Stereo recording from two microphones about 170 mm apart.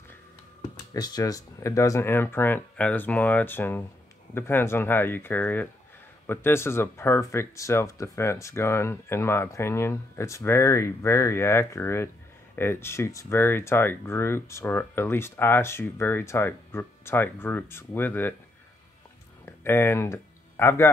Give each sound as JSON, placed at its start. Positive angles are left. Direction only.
{"t": 0.9, "sound": "speech", "side_deg": 25}
{"t": 19.4, "sound": "speech", "side_deg": 15}